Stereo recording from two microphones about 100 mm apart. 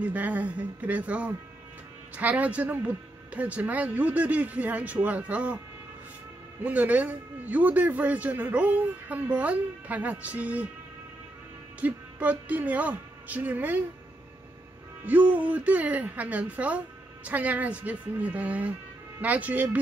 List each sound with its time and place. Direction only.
0.0 s a man's voice: 15° right (ahead or behind)
6.6 s a man's voice: 15° right (ahead or behind)
11.8 s a man's voice: 15° right (ahead or behind)
15.0 s a man's voice: 15° right (ahead or behind)